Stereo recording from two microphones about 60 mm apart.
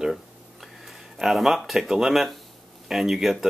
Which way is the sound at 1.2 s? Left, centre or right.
Centre.